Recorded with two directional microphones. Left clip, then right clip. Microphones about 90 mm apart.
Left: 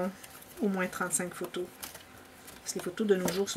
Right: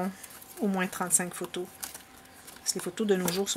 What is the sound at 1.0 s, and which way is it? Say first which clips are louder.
Speech: right 1 dB; 40° right (ahead or behind).